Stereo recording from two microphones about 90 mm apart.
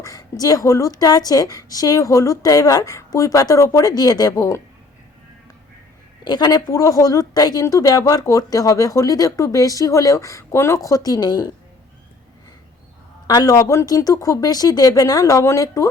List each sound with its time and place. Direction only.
0.0 s a woman's voice: 45° left (ahead or behind)
6.2 s speech: 50° left (ahead or behind); by 10.8 s 30° left (ahead or behind)
10.8 s a woman's voice: 40° left (ahead or behind)
13.2 s speech: 45° left (ahead or behind)